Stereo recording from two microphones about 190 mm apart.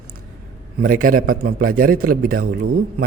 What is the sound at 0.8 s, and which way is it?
Speech, 50° right (ahead or behind).